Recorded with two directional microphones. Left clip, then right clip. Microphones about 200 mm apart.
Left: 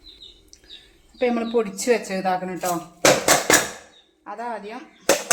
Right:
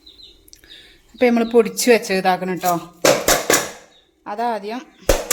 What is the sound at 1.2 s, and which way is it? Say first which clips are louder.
Speech: right 7 dB; 55° right (ahead or behind).